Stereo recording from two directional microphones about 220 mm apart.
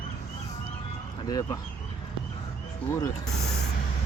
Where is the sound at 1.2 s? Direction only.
15° left (ahead or behind).